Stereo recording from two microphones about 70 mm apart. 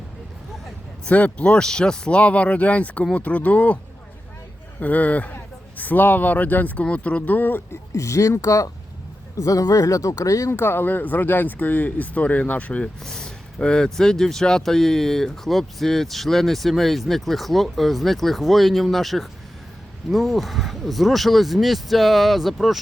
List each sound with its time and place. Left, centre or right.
1.0 s speech: centre
4.8 s speech: left
7.9 s speech: left
10.5 s speech: left; by 12.9 s centre
13.0 s speech: centre